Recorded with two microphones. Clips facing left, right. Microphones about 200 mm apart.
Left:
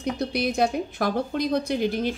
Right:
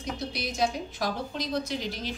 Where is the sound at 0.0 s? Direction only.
55° left (ahead or behind).